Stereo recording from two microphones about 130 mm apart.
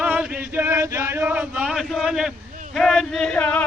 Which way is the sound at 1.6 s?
Centre (ahead or behind).